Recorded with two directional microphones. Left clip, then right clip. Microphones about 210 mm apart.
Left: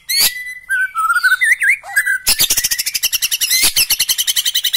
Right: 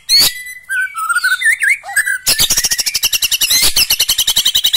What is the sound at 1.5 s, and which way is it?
Bird, 15° left (ahead or behind).